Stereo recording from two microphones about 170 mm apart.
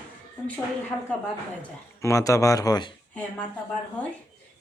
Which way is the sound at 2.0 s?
15° left (ahead or behind).